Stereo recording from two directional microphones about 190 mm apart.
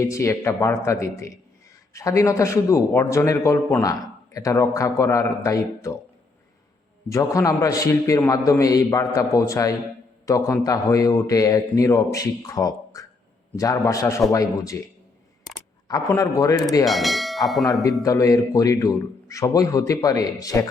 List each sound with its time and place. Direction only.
0.0 s a man's voice: 15° left (ahead or behind)
7.1 s a man's voice: 15° left (ahead or behind)
15.9 s a man's voice: 20° left (ahead or behind)
16.8 s bell: centre (ahead or behind)
18.0 s a man's voice: 15° left (ahead or behind)